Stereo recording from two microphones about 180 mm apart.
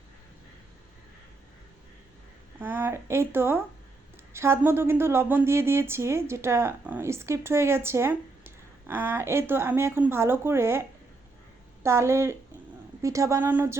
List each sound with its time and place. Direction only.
2.6 s speech: 10° right (ahead or behind)